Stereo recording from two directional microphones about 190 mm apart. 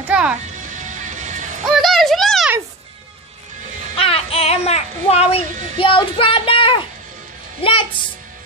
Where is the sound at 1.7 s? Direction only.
Centre (ahead or behind).